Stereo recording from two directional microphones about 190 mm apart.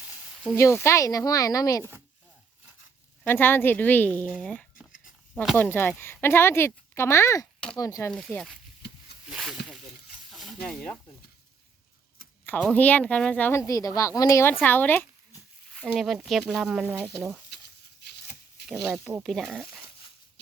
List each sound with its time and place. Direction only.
0.4 s speech: 15° left (ahead or behind)
3.2 s speech: 10° left (ahead or behind)
5.5 s speech: 10° left (ahead or behind)
8.1 s speech: 5° left (ahead or behind)
10.3 s a sound: centre (ahead or behind)
12.5 s speech: 5° left (ahead or behind)
18.0 s shuffling cards: 60° left (ahead or behind)
18.6 s snake: 60° left (ahead or behind)
18.9 s speech: 10° right (ahead or behind)
19.2 s speech: centre (ahead or behind)